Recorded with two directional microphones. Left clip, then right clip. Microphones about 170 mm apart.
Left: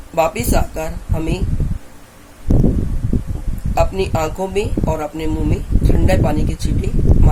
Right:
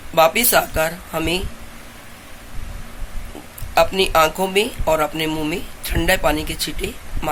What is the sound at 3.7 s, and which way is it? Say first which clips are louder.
A woman's voice: right 3 dB; 10° left (ahead or behind).